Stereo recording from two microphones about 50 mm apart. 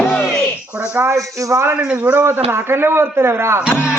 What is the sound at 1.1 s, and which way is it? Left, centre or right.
Speech, right.